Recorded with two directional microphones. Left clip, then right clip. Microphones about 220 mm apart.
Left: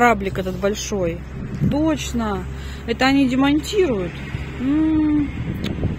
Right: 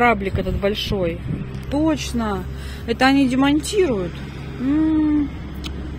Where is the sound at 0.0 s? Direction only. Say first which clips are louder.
Left 1 dB; 20° left (ahead or behind).